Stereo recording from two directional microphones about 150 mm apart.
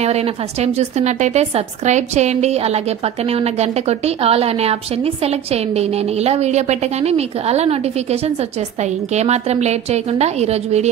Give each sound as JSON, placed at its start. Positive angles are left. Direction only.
{"t": 0.0, "sound": "a woman's voice", "side_deg": -45}